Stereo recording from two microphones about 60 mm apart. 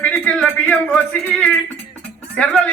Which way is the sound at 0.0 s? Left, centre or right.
Centre.